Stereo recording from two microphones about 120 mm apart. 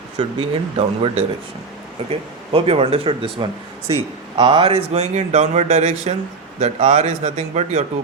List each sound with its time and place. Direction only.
0.2 s a man's voice: 50° right (ahead or behind); by 7.9 s 70° right (ahead or behind)